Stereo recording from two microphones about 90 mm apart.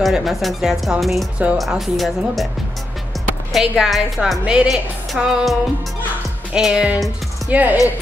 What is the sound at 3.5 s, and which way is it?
A woman's voice, 5° right (ahead or behind).